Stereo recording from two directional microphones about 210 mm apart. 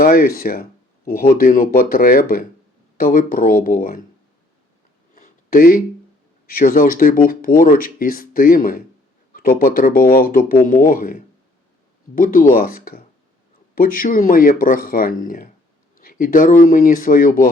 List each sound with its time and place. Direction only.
0.0 s speech: 45° left (ahead or behind)
5.1 s a sound: 40° left (ahead or behind)
6.5 s speech: 45° left (ahead or behind)